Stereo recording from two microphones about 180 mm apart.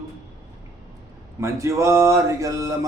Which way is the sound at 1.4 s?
15° right (ahead or behind).